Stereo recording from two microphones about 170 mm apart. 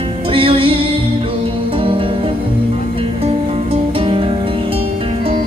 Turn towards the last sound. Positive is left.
turn(degrees=-35)  # may be behind; listen again after turning